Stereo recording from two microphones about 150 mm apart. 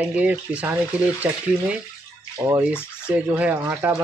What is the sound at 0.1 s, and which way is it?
Speech, 10° right (ahead or behind).